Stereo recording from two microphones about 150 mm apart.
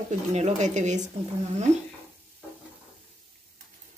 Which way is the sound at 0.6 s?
55° right (ahead or behind).